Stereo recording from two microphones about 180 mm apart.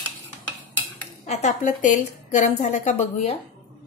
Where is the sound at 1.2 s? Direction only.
40° left (ahead or behind).